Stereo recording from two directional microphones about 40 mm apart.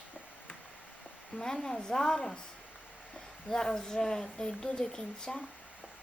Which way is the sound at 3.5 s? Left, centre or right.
Centre.